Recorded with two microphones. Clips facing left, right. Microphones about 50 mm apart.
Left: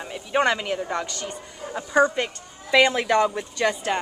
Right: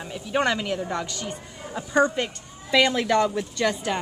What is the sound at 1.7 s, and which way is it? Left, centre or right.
A woman's voice, centre.